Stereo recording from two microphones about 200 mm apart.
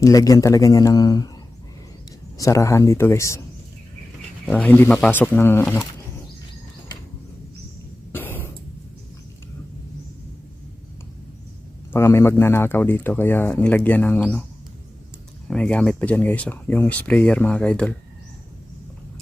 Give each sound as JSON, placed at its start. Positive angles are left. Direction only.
{"t": 0.0, "sound": "a man's voice", "side_deg": 15}
{"t": 2.4, "sound": "a man's voice", "side_deg": 15}
{"t": 4.4, "sound": "a man's voice", "side_deg": 5}
{"t": 8.1, "sound": "cough", "side_deg": 10}
{"t": 11.9, "sound": "a man's voice", "side_deg": 10}
{"t": 15.4, "sound": "a man's voice", "side_deg": 5}